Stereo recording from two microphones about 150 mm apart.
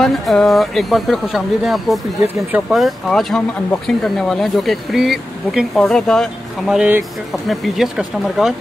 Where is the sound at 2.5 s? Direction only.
Centre (ahead or behind).